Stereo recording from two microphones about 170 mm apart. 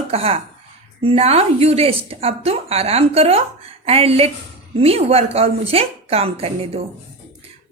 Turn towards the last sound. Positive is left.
turn(degrees=-35)  # may be behind; listen again after turning